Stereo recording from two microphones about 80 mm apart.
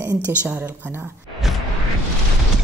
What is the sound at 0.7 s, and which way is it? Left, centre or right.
Speech, right.